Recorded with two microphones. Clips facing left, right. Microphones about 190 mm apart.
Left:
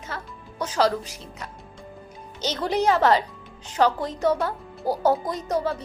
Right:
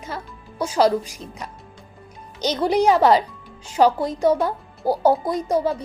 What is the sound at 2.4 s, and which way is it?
A woman's voice, 15° right (ahead or behind).